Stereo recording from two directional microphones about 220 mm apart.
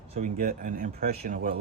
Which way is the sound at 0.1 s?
40° right (ahead or behind).